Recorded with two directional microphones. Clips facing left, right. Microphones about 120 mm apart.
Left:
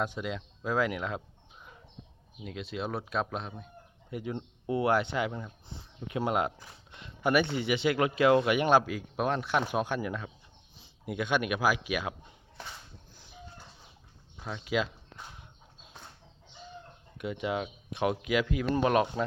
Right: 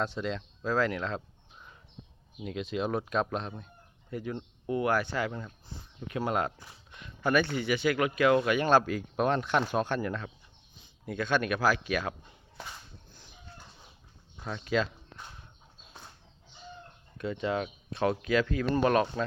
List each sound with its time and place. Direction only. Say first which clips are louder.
0.0 s speech: right 1 dB; 10° left (ahead or behind)
2.4 s speech: right 4 dB; centre (ahead or behind)
4.1 s speech: even; 20° left (ahead or behind)
8.8 s speech: right 2 dB; 5° left (ahead or behind)
14.3 s a sound: right 1 dB; 5° left (ahead or behind)
17.2 s speech: right 1 dB; 10° left (ahead or behind)